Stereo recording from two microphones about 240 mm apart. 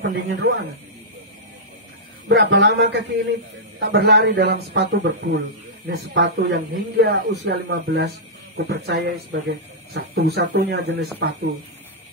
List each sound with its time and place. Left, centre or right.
0.0 s speech: right
2.2 s speech: right